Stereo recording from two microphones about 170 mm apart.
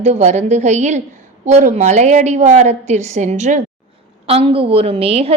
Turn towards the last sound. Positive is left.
turn(degrees=-35)  # may be behind; listen again after turning